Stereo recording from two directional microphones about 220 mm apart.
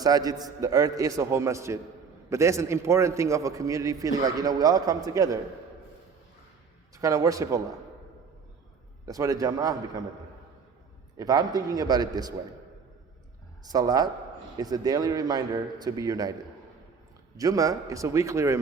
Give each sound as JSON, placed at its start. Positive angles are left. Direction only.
{"t": 0.0, "sound": "a man's voice", "side_deg": -15}
{"t": 6.9, "sound": "a man's voice", "side_deg": -15}
{"t": 9.0, "sound": "a man's voice", "side_deg": -15}
{"t": 11.2, "sound": "a man's voice", "side_deg": -15}
{"t": 13.7, "sound": "a man's voice", "side_deg": -15}
{"t": 17.3, "sound": "a man's voice", "side_deg": -15}